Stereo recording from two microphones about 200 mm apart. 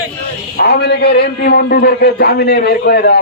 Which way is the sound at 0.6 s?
55° left (ahead or behind).